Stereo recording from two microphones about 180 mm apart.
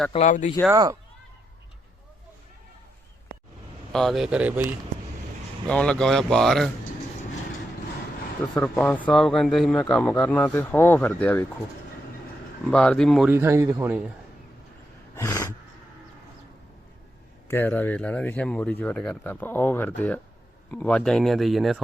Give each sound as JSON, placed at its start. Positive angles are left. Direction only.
{"t": 0.1, "sound": "speech", "side_deg": 40}
{"t": 0.7, "sound": "speech", "side_deg": -20}
{"t": 3.9, "sound": "speech", "side_deg": 0}
{"t": 5.6, "sound": "speech", "side_deg": 5}
{"t": 8.6, "sound": "a man's voice", "side_deg": 5}
{"t": 12.7, "sound": "speech", "side_deg": 5}
{"t": 13.3, "sound": "speech", "side_deg": -15}
{"t": 15.1, "sound": "snort", "side_deg": 15}
{"t": 17.5, "sound": "a man's voice", "side_deg": 10}